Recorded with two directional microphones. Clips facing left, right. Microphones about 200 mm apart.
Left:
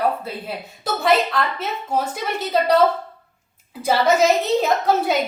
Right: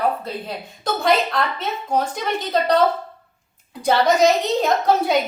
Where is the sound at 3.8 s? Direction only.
5° left (ahead or behind).